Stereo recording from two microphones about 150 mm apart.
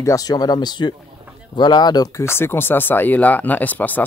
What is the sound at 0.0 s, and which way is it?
Speech, 25° left (ahead or behind).